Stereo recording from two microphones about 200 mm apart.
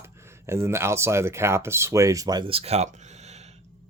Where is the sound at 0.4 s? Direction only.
15° right (ahead or behind).